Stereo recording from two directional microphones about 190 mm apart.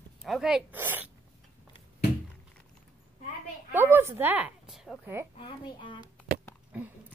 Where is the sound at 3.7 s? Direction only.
10° right (ahead or behind).